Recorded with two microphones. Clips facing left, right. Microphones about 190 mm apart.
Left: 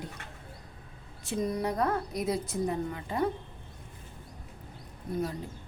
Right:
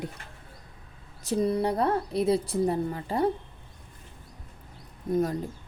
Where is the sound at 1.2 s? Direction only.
35° right (ahead or behind).